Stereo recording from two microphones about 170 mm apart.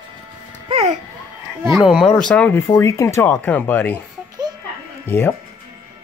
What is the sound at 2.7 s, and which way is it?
Speech, 20° left (ahead or behind).